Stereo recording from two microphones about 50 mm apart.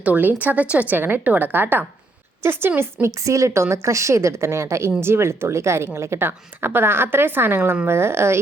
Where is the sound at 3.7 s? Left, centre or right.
Right.